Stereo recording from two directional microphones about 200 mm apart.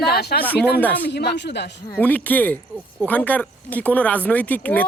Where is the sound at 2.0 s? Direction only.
10° left (ahead or behind).